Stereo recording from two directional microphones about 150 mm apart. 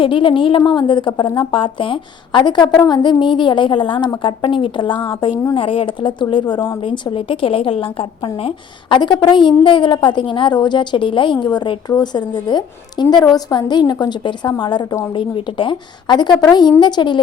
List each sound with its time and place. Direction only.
0.0 s a woman's voice: 35° left (ahead or behind)